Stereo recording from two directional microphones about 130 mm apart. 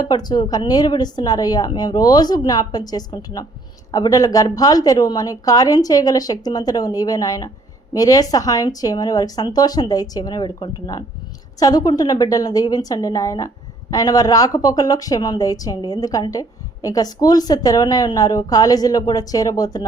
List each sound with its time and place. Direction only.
0.0 s a woman's voice: 30° left (ahead or behind)